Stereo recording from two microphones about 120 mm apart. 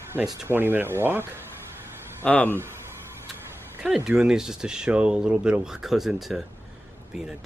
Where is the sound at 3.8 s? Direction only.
5° right (ahead or behind).